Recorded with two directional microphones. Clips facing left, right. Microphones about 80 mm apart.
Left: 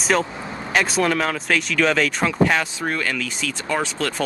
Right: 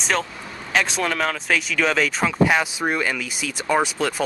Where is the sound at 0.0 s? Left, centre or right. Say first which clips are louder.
Left 3 dB; centre.